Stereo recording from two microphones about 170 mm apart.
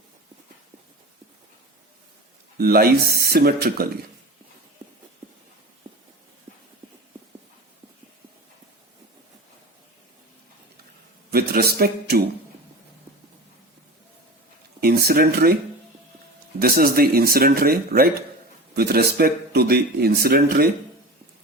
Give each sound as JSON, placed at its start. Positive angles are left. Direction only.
{"t": 2.6, "sound": "speech", "side_deg": -65}
{"t": 11.3, "sound": "a man's voice", "side_deg": -65}
{"t": 14.8, "sound": "speech", "side_deg": -60}
{"t": 16.6, "sound": "speech", "side_deg": -60}